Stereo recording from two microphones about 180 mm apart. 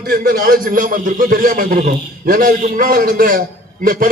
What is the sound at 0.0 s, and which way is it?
A man's voice, 55° right (ahead or behind).